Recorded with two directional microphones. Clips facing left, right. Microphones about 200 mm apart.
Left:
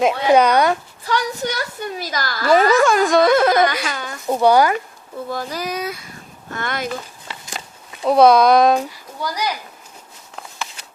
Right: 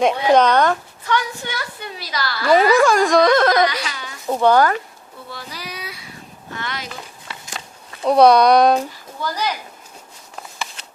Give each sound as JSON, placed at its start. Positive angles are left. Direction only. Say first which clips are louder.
{"t": 0.0, "sound": "speech", "louder": "even", "side_deg": 5}
{"t": 1.0, "sound": "a woman's voice", "louder": "left 1 dB", "side_deg": 35}
{"t": 2.7, "sound": "music", "louder": "even", "side_deg": 0}
{"t": 3.8, "sound": "a sound", "louder": "left 5 dB", "side_deg": 50}
{"t": 4.3, "sound": "speech", "louder": "left 1 dB", "side_deg": 10}
{"t": 5.3, "sound": "speech", "louder": "left 9 dB", "side_deg": 45}
{"t": 8.0, "sound": "music", "louder": "even", "side_deg": 0}
{"t": 9.2, "sound": "speech", "louder": "even", "side_deg": 10}